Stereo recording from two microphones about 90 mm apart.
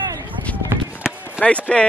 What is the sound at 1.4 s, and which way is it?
Speech, 10° right (ahead or behind).